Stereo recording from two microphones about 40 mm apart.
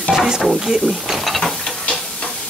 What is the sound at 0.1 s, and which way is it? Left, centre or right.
Stir, centre.